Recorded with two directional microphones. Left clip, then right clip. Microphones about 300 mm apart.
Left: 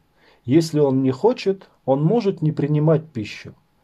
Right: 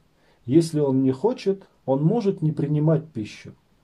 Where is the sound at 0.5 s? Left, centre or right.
Left.